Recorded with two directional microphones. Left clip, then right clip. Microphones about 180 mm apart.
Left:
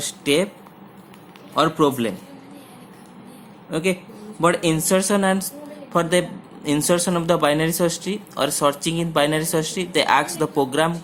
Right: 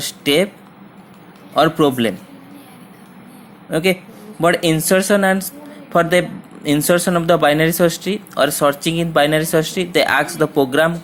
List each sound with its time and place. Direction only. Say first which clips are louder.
0.0 s speech: right 4 dB; 20° right (ahead or behind)
1.5 s a man's voice: right 4 dB; 20° right (ahead or behind)
3.7 s a woman's voice: right 6 dB; 20° right (ahead or behind)